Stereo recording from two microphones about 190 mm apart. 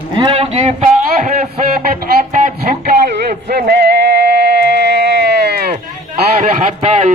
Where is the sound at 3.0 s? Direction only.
60° right (ahead or behind).